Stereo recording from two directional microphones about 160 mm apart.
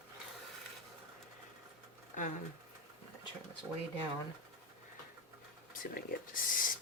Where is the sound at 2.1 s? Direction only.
50° left (ahead or behind).